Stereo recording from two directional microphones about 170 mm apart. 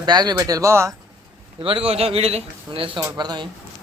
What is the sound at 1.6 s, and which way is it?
Speech, 30° right (ahead or behind).